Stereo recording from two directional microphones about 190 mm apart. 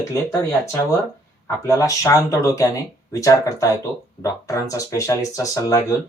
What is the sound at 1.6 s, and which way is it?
Speech, 15° left (ahead or behind).